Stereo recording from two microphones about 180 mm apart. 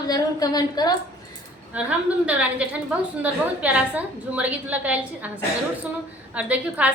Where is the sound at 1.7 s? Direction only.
10° right (ahead or behind).